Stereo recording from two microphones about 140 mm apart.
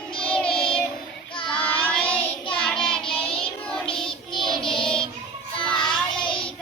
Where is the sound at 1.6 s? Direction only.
10° left (ahead or behind).